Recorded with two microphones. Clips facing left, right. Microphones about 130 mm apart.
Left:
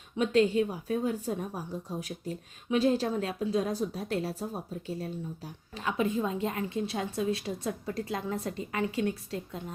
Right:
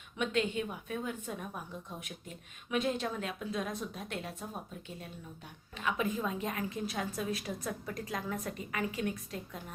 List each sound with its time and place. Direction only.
0.2 s a woman's voice: 35° left (ahead or behind)